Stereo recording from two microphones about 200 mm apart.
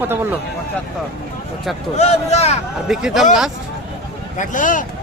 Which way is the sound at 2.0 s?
30° left (ahead or behind).